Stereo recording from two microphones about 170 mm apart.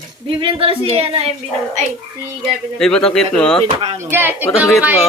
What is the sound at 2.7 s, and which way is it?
Speech, 5° left (ahead or behind).